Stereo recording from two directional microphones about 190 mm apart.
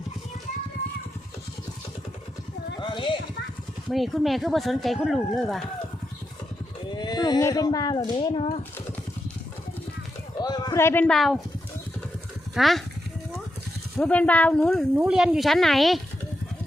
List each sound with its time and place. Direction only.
2.8 s music: 25° left (ahead or behind)
3.8 s speech: centre (ahead or behind)
6.9 s speech: 20° left (ahead or behind)
10.4 s speech: 20° left (ahead or behind); by 11.4 s centre (ahead or behind)
12.5 s speech: centre (ahead or behind)
13.9 s speech: 5° left (ahead or behind)